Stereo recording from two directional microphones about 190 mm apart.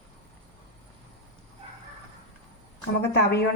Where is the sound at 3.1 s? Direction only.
60° left (ahead or behind).